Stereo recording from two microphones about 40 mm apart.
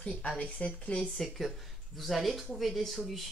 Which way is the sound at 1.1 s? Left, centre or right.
Centre.